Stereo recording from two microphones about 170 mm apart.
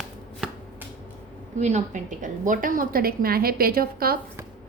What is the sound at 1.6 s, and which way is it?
A woman's voice, 45° right (ahead or behind).